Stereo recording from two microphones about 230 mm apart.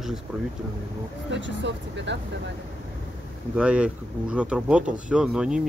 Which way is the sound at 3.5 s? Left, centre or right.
Centre.